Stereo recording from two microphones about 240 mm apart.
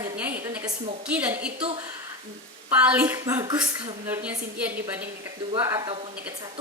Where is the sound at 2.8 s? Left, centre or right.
Centre.